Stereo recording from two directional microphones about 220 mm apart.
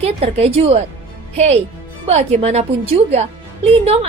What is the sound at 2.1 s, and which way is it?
A woman's voice, 30° right (ahead or behind).